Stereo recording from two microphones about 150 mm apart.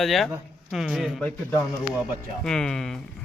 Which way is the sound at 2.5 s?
5° left (ahead or behind).